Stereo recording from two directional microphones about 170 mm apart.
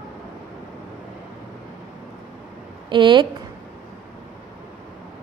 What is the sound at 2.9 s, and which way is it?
Speech, 30° right (ahead or behind).